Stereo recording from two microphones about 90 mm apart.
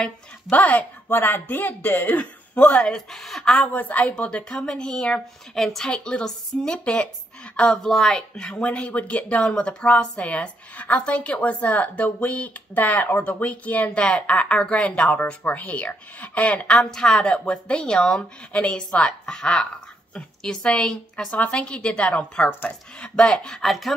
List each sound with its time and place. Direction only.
0.0 s speech: 15° left (ahead or behind)
3.6 s speech: 15° left (ahead or behind)